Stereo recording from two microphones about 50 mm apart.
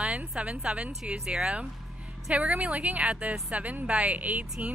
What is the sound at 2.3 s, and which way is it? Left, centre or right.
A woman's voice, right.